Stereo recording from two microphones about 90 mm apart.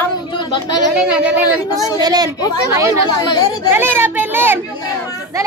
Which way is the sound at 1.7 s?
40° left (ahead or behind).